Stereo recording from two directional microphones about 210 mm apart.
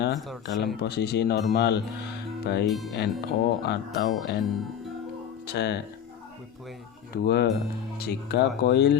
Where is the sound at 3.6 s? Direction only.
50° left (ahead or behind).